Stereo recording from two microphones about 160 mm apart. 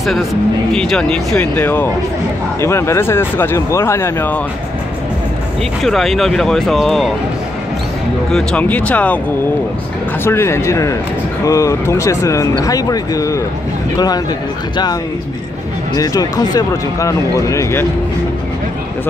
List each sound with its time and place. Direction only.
0.0 s speech: centre (ahead or behind)
5.8 s speech: centre (ahead or behind)
8.3 s speech: 5° left (ahead or behind)
10.2 s speech: 15° left (ahead or behind)
16.0 s speech: 25° left (ahead or behind)